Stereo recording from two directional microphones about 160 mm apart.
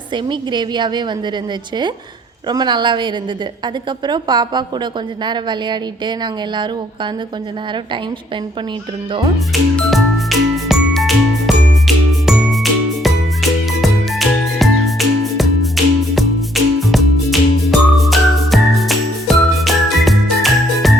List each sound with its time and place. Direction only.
0.1 s a woman's voice: 30° right (ahead or behind)
2.5 s a woman's voice: 25° right (ahead or behind)
9.5 s music: centre (ahead or behind)